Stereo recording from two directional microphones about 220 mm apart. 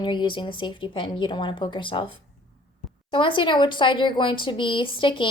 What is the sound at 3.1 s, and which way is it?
Speech, 20° left (ahead or behind).